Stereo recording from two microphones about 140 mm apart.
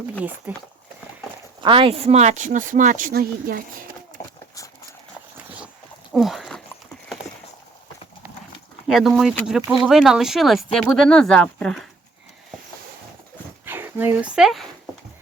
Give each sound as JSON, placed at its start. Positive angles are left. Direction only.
{"t": 0.2, "sound": "speech", "side_deg": -10}
{"t": 1.6, "sound": "speech", "side_deg": -40}
{"t": 6.1, "sound": "dog", "side_deg": 0}
{"t": 8.9, "sound": "speech", "side_deg": 0}
{"t": 13.7, "sound": "dog", "side_deg": -15}
{"t": 14.3, "sound": "speech", "side_deg": 0}